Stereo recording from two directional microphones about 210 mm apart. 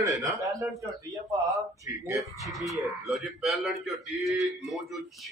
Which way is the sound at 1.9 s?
15° right (ahead or behind).